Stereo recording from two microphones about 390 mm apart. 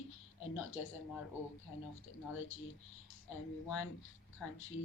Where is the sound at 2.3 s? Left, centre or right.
Left.